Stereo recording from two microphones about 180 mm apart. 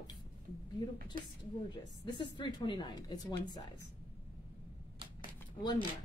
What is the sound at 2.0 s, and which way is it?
A woman's voice, 25° left (ahead or behind).